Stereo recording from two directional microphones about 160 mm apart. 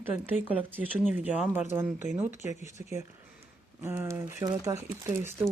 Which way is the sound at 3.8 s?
15° right (ahead or behind).